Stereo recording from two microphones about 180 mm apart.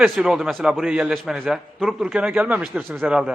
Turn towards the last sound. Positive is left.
turn(degrees=-5)  # may be behind; listen again after turning